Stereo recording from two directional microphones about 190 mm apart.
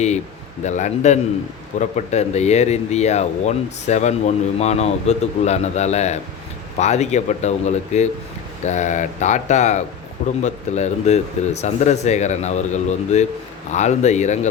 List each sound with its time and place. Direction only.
0.6 s speech: 40° left (ahead or behind)